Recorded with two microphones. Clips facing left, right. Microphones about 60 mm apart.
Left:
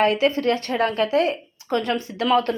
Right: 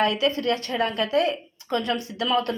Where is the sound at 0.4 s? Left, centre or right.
Left.